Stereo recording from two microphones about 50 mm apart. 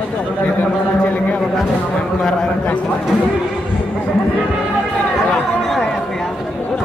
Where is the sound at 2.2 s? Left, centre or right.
Centre.